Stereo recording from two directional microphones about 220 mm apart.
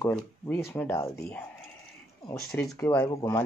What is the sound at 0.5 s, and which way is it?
Speech, 10° left (ahead or behind).